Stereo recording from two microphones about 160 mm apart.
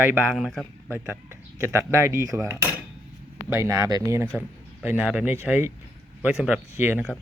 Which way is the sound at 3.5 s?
15° right (ahead or behind).